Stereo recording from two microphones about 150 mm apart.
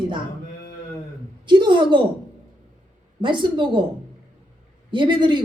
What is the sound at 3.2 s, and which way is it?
Speech, 30° right (ahead or behind).